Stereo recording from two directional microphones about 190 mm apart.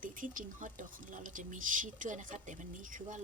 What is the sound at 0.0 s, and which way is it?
Speech, 45° right (ahead or behind).